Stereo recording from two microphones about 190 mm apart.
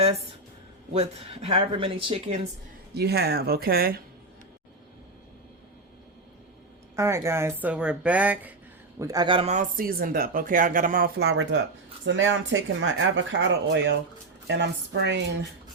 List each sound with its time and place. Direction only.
0.9 s speech: 35° right (ahead or behind)
2.9 s speech: 60° right (ahead or behind)
6.9 s speech: 15° right (ahead or behind)
9.0 s speech: 20° right (ahead or behind); by 11.6 s 65° right (ahead or behind)
12.0 s a woman's voice: 80° right